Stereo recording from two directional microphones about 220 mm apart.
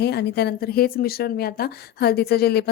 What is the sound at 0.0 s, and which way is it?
Speech, 50° left (ahead or behind).